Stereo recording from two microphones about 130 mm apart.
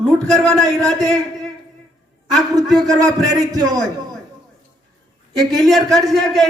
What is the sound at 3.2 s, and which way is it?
Speech, 30° right (ahead or behind).